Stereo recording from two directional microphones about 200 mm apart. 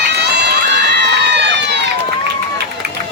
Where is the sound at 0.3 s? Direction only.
55° right (ahead or behind).